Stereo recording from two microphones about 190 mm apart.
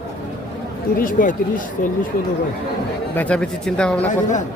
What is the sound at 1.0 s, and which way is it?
Speech, 45° left (ahead or behind).